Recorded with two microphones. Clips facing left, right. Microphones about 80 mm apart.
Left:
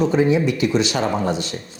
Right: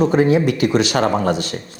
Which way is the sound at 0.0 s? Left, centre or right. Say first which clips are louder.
Right 2 dB; right.